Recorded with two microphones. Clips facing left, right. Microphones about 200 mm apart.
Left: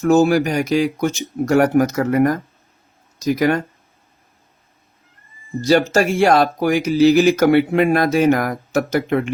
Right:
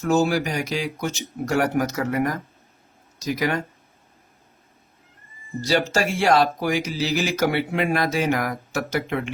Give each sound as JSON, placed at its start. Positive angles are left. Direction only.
{"t": 0.1, "sound": "speech", "side_deg": 50}
{"t": 5.6, "sound": "speech", "side_deg": 50}